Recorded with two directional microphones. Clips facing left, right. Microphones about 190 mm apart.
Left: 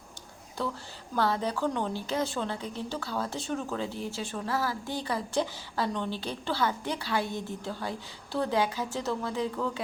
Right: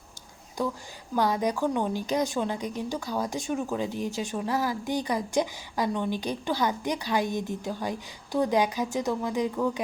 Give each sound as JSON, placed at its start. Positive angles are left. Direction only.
{"t": 0.6, "sound": "a woman's voice", "side_deg": -15}